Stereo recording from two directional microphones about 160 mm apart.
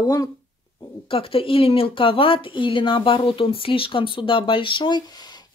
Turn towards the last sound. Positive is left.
turn(degrees=25)  # may be behind; listen again after turning